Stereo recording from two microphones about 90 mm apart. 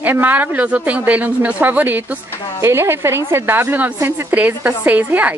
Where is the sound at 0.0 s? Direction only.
20° right (ahead or behind).